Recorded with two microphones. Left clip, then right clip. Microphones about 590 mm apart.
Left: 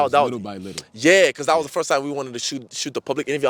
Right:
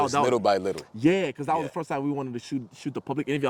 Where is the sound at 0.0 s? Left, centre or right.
Left.